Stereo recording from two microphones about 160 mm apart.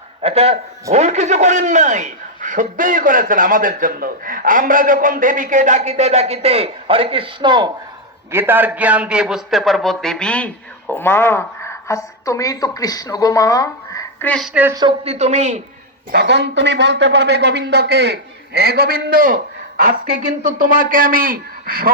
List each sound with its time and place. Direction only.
0.2 s a man's voice: 40° right (ahead or behind)
8.3 s a man's voice: 15° right (ahead or behind); by 14.3 s 20° left (ahead or behind)
14.3 s a woman's voice: centre (ahead or behind)
14.5 s speech: 10° right (ahead or behind)
15.0 s a man's voice: 40° right (ahead or behind)
16.1 s a man's voice: 90° right; by 21.8 s 65° right (ahead or behind)